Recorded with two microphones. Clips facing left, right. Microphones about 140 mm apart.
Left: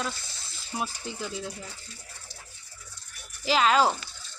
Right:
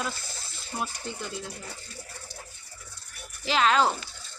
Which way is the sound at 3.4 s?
5° left (ahead or behind).